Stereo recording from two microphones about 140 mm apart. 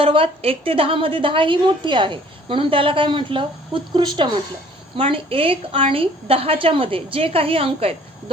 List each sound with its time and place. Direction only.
0.0 s a woman's voice: 40° right (ahead or behind)